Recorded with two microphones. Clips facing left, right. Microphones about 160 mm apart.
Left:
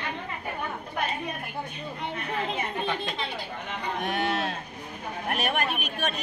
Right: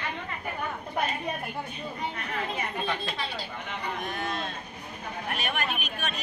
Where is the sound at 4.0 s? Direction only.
75° left (ahead or behind).